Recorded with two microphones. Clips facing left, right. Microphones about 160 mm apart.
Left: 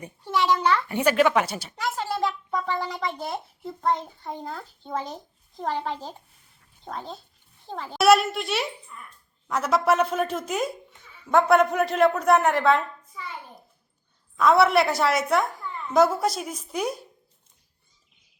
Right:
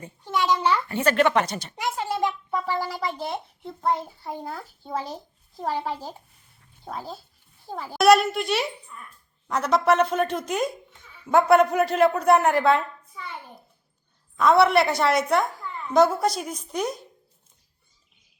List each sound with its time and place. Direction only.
0.4 s a child's voice: 5° right (ahead or behind)
0.9 s speech: 15° left (ahead or behind)
1.7 s a child's voice: 20° right (ahead or behind); by 13.2 s centre (ahead or behind)
14.3 s a woman's voice: centre (ahead or behind)